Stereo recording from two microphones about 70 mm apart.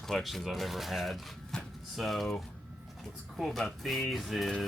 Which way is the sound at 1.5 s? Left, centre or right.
Centre.